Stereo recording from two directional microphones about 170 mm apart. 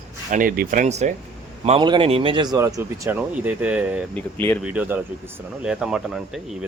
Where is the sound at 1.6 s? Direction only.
30° right (ahead or behind).